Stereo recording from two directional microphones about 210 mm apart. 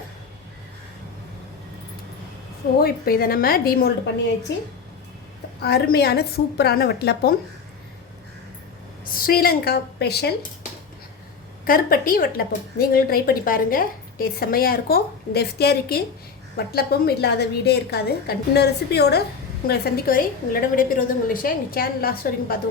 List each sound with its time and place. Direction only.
2.8 s a woman's voice: 45° left (ahead or behind)
5.6 s a woman's voice: 50° left (ahead or behind)
9.0 s a woman's voice: 45° left (ahead or behind)
11.6 s a woman's voice: 45° left (ahead or behind)